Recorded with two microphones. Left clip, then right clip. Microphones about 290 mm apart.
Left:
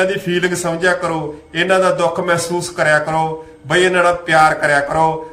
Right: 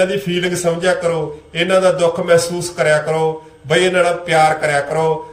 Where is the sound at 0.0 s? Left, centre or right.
Centre.